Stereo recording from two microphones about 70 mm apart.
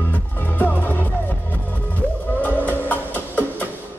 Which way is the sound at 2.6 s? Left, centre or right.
Left.